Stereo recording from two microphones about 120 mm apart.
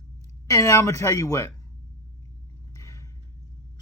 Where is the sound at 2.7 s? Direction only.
25° left (ahead or behind).